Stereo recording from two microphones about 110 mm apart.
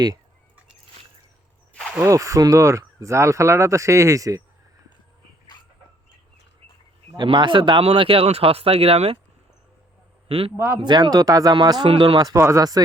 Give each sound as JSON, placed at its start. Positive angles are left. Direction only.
{"t": 2.0, "sound": "speech", "side_deg": -30}
{"t": 7.2, "sound": "speech", "side_deg": -45}
{"t": 10.2, "sound": "a man's voice", "side_deg": -60}
{"t": 10.8, "sound": "speech", "side_deg": -45}
{"t": 11.9, "sound": "speech", "side_deg": -55}
{"t": 12.1, "sound": "speech", "side_deg": -35}